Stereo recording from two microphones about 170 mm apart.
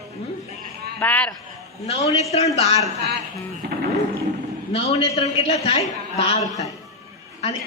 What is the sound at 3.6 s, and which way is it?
Music, 75° right (ahead or behind).